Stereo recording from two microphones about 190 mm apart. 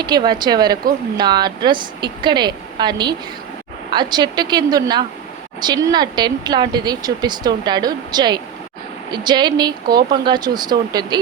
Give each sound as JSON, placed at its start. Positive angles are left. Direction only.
{"t": 0.0, "sound": "speech", "side_deg": -20}